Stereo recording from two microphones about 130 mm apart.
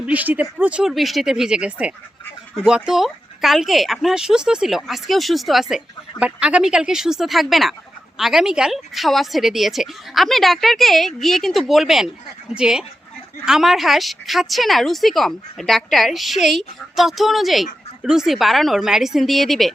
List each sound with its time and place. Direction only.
0.0 s speech: 10° right (ahead or behind)